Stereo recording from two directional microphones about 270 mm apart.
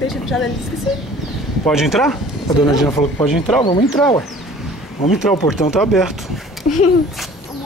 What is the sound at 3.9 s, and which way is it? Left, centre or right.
Speech, centre.